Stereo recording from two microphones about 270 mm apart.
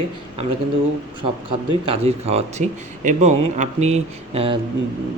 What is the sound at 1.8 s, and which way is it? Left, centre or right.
Speech, right.